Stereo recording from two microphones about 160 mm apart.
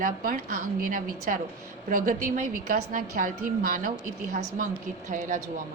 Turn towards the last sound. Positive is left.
turn(degrees=-55)  # may be behind; listen again after turning